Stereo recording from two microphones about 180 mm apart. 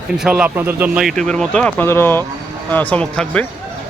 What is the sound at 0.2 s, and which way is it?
Speech, 5° right (ahead or behind).